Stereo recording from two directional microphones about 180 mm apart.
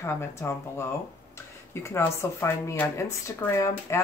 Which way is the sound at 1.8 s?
15° left (ahead or behind).